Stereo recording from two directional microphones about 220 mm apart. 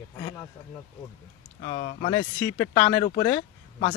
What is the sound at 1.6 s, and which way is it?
Speech, 30° left (ahead or behind).